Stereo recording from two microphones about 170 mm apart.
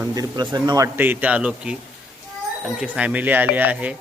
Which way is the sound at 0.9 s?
10° right (ahead or behind).